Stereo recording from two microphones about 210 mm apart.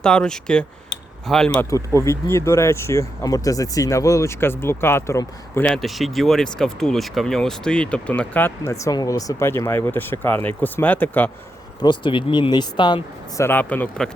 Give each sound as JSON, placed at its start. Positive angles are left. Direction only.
{"t": 0.0, "sound": "speech", "side_deg": 5}
{"t": 11.8, "sound": "speech", "side_deg": 20}